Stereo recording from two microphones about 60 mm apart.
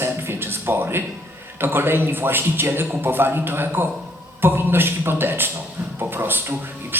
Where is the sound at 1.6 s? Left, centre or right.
Right.